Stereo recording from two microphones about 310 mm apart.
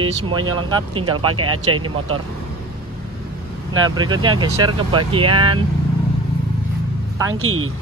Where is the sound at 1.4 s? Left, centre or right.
Right.